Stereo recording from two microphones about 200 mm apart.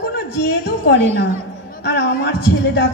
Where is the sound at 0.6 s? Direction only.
55° left (ahead or behind).